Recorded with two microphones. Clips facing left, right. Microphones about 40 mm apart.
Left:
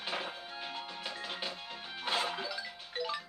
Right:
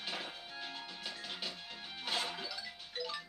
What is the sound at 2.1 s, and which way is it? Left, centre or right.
Music, centre.